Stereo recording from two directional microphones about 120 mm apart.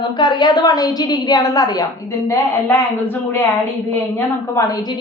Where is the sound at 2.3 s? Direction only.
15° left (ahead or behind).